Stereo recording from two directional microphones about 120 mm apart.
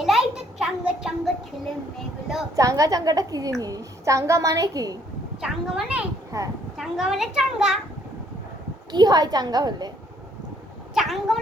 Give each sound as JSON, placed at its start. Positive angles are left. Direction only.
{"t": 0.0, "sound": "a sound", "side_deg": -5}
{"t": 2.6, "sound": "a woman's voice", "side_deg": -30}
{"t": 5.4, "sound": "a child's voice", "side_deg": -5}
{"t": 8.9, "sound": "a woman's voice", "side_deg": -35}
{"t": 10.9, "sound": "a child's voice", "side_deg": 0}